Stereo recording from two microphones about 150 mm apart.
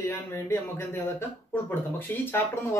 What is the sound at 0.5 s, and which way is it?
Speech, 15° left (ahead or behind).